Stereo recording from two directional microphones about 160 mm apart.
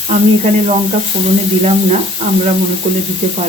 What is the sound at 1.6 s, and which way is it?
Speech, 45° right (ahead or behind).